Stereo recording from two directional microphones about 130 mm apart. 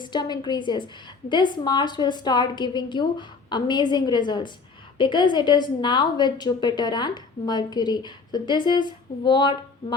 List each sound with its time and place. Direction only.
0.0 s a woman's voice: 35° left (ahead or behind)